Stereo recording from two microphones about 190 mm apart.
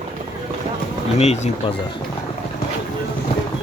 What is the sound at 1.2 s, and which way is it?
Speech, 35° left (ahead or behind).